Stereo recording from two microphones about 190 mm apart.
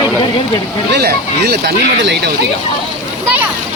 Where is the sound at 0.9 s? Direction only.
55° right (ahead or behind).